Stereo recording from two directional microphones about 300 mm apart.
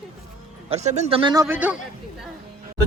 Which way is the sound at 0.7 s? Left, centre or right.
Right.